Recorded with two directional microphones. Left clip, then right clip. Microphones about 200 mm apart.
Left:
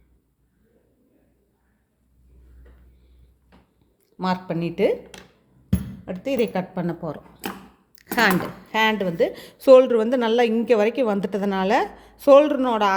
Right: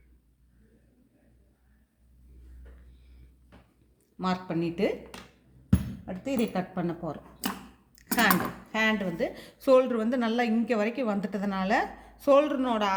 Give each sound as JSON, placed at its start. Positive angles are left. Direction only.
{"t": 4.2, "sound": "a woman's voice", "side_deg": 35}
{"t": 6.2, "sound": "a woman's voice", "side_deg": 40}
{"t": 7.9, "sound": "a sound", "side_deg": 40}
{"t": 8.7, "sound": "a woman's voice", "side_deg": 50}